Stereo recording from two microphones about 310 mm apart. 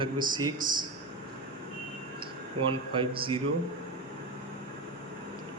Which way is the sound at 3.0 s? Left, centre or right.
Centre.